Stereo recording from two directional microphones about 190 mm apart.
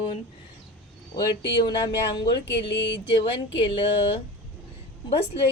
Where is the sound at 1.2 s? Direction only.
25° left (ahead or behind).